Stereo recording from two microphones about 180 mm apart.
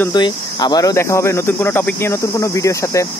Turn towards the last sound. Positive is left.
turn(degrees=15)  # may be behind; listen again after turning